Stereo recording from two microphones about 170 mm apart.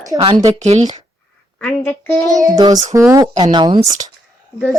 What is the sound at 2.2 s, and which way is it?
Child singing, 20° right (ahead or behind).